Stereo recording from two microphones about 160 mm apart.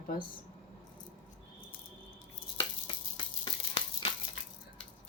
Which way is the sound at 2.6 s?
30° left (ahead or behind).